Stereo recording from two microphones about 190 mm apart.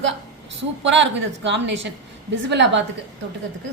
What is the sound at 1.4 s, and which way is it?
A woman's voice, 70° right (ahead or behind).